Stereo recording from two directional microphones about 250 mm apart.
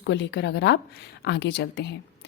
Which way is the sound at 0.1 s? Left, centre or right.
Left.